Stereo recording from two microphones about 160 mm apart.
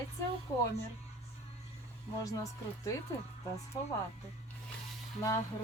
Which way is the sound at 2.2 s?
20° left (ahead or behind).